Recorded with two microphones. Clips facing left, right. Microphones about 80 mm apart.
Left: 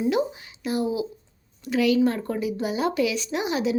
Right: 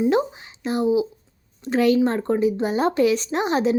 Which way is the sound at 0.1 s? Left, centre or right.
Right.